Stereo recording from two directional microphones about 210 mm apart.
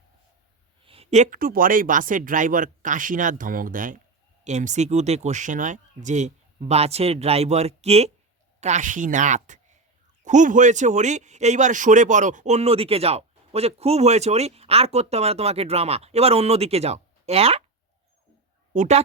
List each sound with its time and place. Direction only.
0.9 s speech: 30° right (ahead or behind)
18.7 s speech: 35° right (ahead or behind)